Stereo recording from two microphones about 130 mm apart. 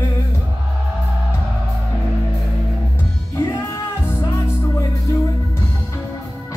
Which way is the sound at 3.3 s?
20° left (ahead or behind).